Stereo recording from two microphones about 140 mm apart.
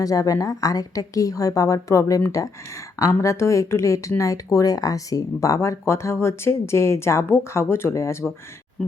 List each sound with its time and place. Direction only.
0.0 s speech: 25° left (ahead or behind)